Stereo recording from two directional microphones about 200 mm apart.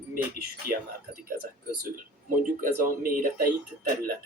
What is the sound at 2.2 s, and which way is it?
Speech, 45° right (ahead or behind).